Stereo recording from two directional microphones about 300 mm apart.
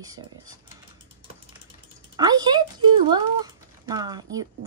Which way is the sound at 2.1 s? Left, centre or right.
Centre.